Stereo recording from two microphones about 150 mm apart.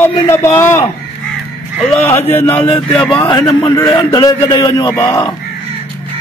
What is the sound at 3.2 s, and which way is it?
A man's voice, 20° left (ahead or behind).